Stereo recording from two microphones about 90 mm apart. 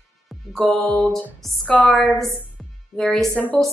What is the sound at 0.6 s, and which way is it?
A woman's voice, 10° left (ahead or behind).